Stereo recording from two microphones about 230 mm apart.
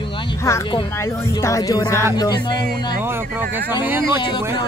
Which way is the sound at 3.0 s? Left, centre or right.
Centre.